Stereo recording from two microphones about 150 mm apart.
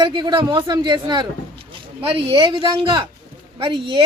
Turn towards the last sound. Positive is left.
turn(degrees=-35)  # may be behind; listen again after turning